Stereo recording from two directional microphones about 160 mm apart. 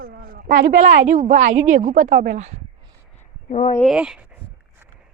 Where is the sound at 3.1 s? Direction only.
45° left (ahead or behind).